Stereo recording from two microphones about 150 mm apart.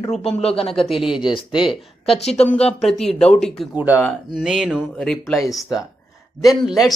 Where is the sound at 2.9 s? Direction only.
Centre (ahead or behind).